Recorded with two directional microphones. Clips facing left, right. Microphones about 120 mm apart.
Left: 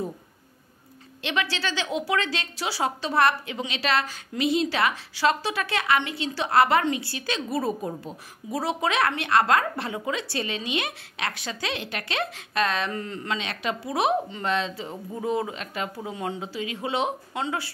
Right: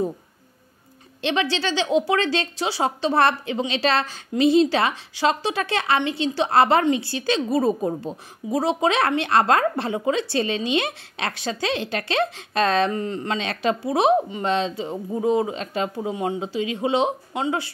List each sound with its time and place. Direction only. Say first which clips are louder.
1.2 s a woman's voice: right 5 dB; 25° right (ahead or behind)
12.9 s a woman's voice: right 5 dB; 20° right (ahead or behind)
13.4 s a woman's voice: right 6 dB; 35° right (ahead or behind)